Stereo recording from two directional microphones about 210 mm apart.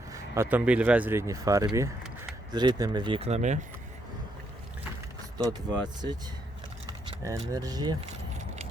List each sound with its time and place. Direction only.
0.1 s speech: 10° right (ahead or behind); by 3.6 s 35° right (ahead or behind)
5.4 s speech: 20° right (ahead or behind)
7.5 s speech: 15° right (ahead or behind)